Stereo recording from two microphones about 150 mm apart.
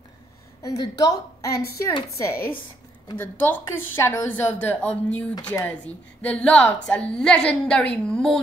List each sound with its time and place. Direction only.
0.6 s a woman's voice: 25° left (ahead or behind); by 8.4 s 5° left (ahead or behind)